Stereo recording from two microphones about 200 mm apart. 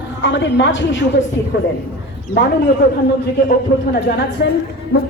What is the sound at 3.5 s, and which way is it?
Speech, 50° left (ahead or behind).